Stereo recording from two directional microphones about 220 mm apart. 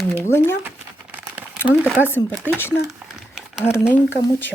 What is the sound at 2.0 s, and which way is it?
Speech, 10° left (ahead or behind).